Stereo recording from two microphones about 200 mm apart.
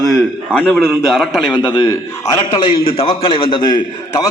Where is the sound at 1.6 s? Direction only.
20° left (ahead or behind).